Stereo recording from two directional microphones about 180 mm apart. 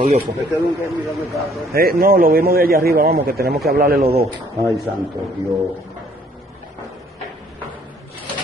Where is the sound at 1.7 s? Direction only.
55° right (ahead or behind).